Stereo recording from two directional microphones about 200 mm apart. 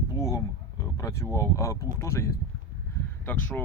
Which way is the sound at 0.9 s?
15° left (ahead or behind).